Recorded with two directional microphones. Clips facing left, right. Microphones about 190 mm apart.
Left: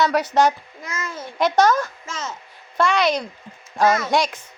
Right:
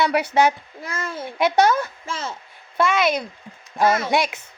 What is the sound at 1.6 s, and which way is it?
Speech, 10° right (ahead or behind).